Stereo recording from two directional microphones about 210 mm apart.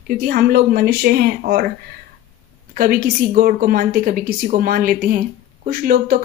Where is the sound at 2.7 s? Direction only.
40° right (ahead or behind).